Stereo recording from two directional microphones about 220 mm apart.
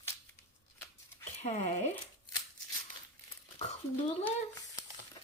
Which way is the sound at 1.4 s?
30° left (ahead or behind).